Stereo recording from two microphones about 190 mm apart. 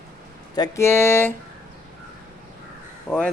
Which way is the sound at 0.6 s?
15° left (ahead or behind).